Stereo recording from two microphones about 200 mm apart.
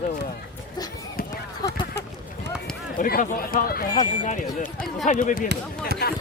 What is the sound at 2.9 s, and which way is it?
Speech, 45° left (ahead or behind).